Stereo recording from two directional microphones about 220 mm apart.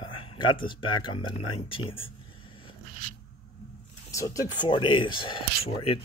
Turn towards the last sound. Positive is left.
turn(degrees=25)  # may be behind; listen again after turning